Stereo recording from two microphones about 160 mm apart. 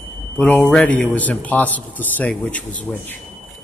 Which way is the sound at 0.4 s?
5° left (ahead or behind).